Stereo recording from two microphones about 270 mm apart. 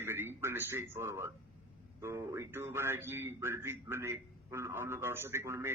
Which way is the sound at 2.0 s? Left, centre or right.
Centre.